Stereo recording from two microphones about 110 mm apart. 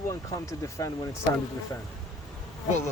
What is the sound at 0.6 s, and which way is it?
Speech, 30° left (ahead or behind).